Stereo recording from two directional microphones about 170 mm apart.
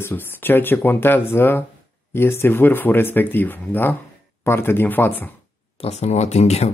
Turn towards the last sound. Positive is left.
turn(degrees=40)  # may be behind; listen again after turning